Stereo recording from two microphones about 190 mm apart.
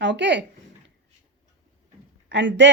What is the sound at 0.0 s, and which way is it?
Speech, 70° right (ahead or behind).